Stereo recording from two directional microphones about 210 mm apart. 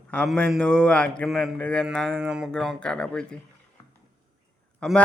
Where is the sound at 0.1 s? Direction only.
5° left (ahead or behind).